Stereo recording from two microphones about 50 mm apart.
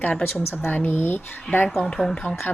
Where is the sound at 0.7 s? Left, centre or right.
Left.